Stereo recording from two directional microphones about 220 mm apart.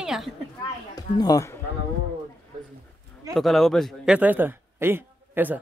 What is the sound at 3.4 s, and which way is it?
A man's voice, centre (ahead or behind).